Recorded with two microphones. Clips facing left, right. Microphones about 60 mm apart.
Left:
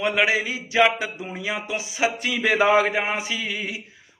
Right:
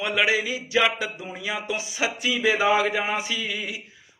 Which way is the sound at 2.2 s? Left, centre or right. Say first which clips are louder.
Left 1 dB; left.